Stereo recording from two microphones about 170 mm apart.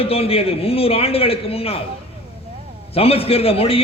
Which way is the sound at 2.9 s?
35° left (ahead or behind).